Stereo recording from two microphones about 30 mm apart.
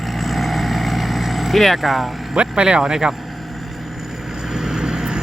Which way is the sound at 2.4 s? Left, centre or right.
Right.